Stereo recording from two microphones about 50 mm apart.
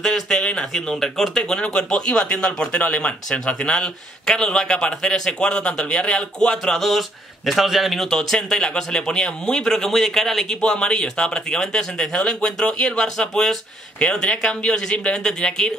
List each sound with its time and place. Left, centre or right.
0.0 s speech: centre
1.4 s speech: left
6.8 s speech: centre